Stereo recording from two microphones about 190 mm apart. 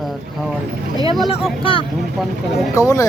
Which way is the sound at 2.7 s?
15° left (ahead or behind).